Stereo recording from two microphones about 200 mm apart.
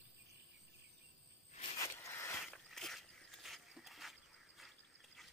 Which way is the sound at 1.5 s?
30° left (ahead or behind).